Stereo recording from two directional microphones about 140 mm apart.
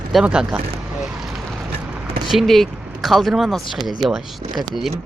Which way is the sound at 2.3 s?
Centre (ahead or behind).